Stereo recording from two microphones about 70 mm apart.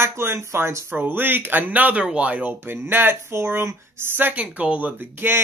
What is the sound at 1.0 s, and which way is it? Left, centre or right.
Speech, right.